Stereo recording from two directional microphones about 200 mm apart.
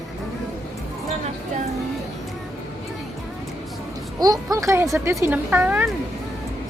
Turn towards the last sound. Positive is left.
turn(degrees=-10)  # may be behind; listen again after turning